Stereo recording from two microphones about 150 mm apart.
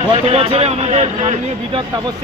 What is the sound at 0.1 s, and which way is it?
A man's voice, 40° right (ahead or behind).